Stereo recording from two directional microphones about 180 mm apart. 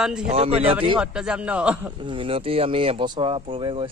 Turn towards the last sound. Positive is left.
turn(degrees=-30)  # may be behind; listen again after turning